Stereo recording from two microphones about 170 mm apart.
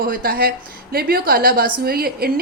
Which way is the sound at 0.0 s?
60° right (ahead or behind).